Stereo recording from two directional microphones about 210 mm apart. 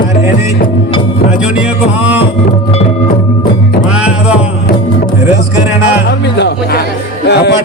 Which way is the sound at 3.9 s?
5° right (ahead or behind).